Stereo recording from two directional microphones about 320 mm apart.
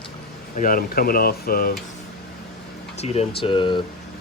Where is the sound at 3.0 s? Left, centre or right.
Centre.